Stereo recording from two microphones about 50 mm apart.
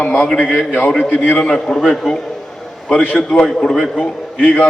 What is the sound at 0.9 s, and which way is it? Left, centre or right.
A man's voice, centre.